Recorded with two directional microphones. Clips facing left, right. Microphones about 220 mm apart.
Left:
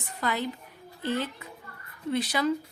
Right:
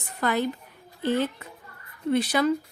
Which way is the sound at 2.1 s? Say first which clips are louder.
Right 5 dB; 55° right (ahead or behind).